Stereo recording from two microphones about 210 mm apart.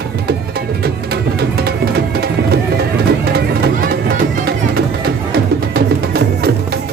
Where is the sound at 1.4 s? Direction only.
50° right (ahead or behind).